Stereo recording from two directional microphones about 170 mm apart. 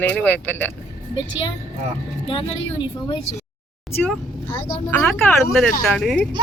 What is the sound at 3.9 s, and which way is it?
Speech, 10° left (ahead or behind).